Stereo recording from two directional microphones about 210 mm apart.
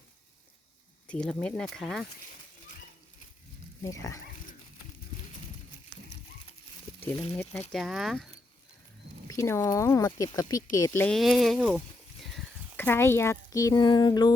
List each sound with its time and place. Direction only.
1.0 s speech: 5° left (ahead or behind)
3.8 s speech: 15° left (ahead or behind)
7.7 s speech: centre (ahead or behind)
9.3 s speech: 15° left (ahead or behind)